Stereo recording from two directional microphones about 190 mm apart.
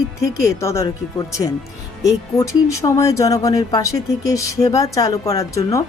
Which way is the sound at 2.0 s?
15° left (ahead or behind).